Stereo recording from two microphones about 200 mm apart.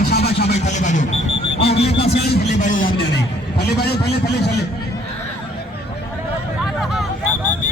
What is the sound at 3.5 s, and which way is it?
Speech, 55° left (ahead or behind).